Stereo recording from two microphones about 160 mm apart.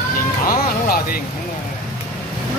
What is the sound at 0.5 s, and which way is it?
Music, 65° left (ahead or behind).